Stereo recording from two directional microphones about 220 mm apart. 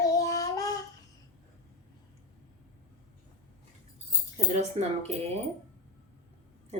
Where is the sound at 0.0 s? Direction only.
15° left (ahead or behind).